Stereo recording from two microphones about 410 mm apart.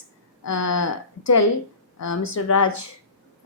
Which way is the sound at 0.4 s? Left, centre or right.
Left.